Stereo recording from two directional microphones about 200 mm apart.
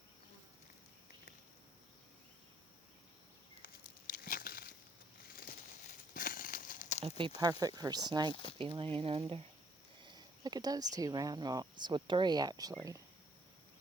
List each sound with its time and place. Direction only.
3.6 s a sound: 45° left (ahead or behind)
5.3 s crumpling: 45° left (ahead or behind)
7.0 s speech: 25° right (ahead or behind)